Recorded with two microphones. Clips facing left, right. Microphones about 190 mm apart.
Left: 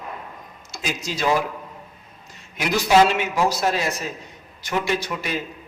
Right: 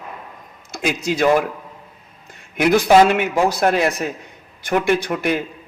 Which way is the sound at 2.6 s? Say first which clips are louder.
Right 5 dB; 55° right (ahead or behind).